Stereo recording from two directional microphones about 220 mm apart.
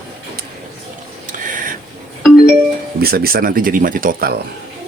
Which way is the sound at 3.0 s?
45° right (ahead or behind).